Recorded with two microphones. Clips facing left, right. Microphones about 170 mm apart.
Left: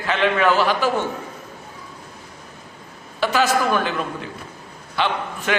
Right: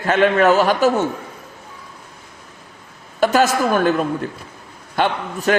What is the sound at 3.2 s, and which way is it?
A man's voice, 45° right (ahead or behind).